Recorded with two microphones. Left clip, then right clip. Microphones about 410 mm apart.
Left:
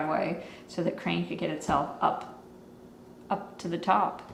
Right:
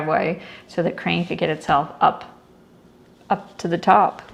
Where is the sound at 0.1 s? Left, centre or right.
Right.